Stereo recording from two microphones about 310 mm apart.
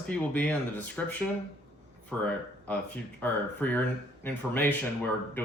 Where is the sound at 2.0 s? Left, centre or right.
Centre.